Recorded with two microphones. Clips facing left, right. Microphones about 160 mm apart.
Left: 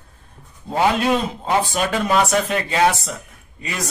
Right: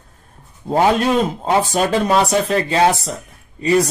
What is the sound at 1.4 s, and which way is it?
Speech, 40° right (ahead or behind).